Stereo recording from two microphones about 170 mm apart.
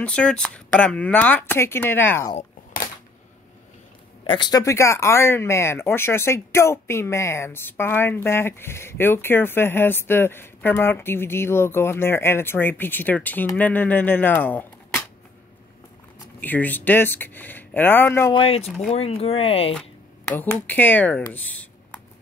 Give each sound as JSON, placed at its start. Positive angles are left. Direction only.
{"t": 0.0, "sound": "speech", "side_deg": 5}
{"t": 4.3, "sound": "speech", "side_deg": 25}
{"t": 16.3, "sound": "speech", "side_deg": 10}
{"t": 18.3, "sound": "speech", "side_deg": 35}
{"t": 20.2, "sound": "speech", "side_deg": 10}